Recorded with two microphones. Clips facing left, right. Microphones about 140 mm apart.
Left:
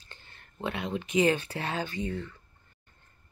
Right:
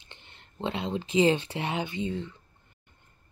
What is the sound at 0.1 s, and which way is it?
Speech, 20° right (ahead or behind).